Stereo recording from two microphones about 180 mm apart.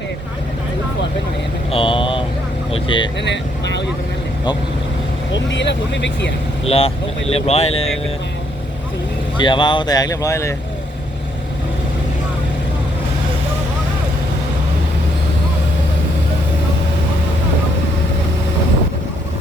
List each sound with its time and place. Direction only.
1.7 s vehicle: 30° left (ahead or behind)
2.7 s speech: 30° left (ahead or behind)
3.2 s speech: 75° left (ahead or behind)
5.3 s speech: 85° left
6.7 s speech: 35° left (ahead or behind)
9.4 s speech: 25° left (ahead or behind)